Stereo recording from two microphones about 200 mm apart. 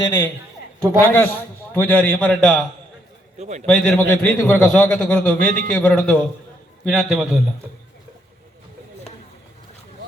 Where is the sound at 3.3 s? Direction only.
35° right (ahead or behind).